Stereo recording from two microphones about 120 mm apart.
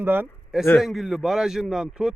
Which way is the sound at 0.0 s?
15° right (ahead or behind).